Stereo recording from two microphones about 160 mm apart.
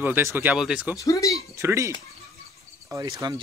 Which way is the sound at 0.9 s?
20° left (ahead or behind).